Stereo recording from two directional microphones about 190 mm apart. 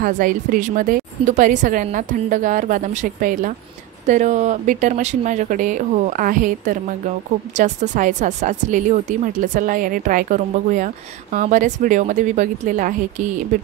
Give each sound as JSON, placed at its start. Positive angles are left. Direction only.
{"t": 0.0, "sound": "a woman's voice", "side_deg": -45}